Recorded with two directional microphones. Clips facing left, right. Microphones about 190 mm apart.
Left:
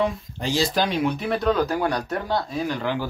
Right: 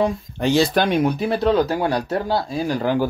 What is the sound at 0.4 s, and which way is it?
Speech, 60° right (ahead or behind).